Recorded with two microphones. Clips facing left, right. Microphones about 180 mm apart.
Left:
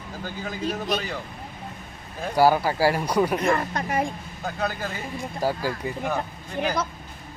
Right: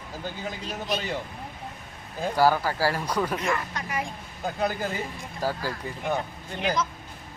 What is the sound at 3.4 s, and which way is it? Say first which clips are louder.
Speech: left 5 dB; 40° left (ahead or behind).